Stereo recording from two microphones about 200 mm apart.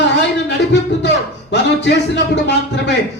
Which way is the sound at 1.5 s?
60° left (ahead or behind).